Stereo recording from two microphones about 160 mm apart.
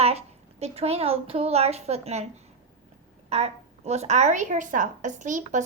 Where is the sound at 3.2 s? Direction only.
40° right (ahead or behind).